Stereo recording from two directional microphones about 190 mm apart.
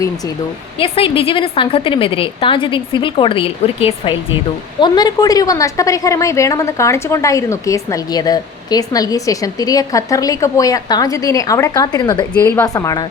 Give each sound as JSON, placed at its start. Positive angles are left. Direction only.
{"t": 0.8, "sound": "a woman's voice", "side_deg": 30}
{"t": 12.3, "sound": "a woman's voice", "side_deg": 10}